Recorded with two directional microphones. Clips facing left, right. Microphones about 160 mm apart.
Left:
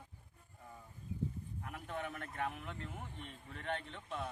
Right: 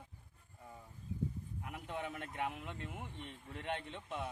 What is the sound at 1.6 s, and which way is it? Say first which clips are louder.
A man's voice: even; 20° right (ahead or behind).